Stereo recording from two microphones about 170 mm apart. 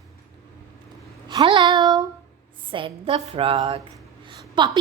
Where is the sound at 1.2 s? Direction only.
25° right (ahead or behind).